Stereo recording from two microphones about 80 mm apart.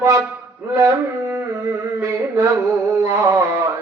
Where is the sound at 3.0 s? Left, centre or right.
Right.